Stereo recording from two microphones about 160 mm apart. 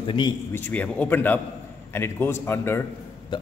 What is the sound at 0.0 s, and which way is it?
Speech, 30° left (ahead or behind).